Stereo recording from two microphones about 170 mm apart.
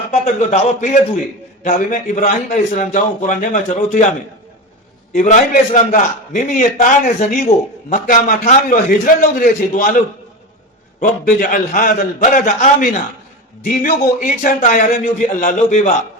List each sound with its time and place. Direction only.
0.1 s a man's voice: 40° left (ahead or behind)
5.1 s a man's voice: 45° left (ahead or behind)
11.0 s a man's voice: 50° left (ahead or behind)